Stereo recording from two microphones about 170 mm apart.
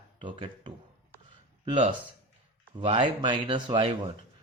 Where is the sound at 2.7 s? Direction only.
30° right (ahead or behind).